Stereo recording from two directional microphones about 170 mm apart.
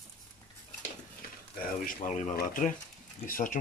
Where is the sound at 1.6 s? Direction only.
50° left (ahead or behind).